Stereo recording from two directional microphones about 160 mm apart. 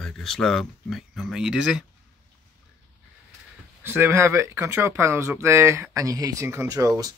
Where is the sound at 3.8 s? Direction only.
15° right (ahead or behind).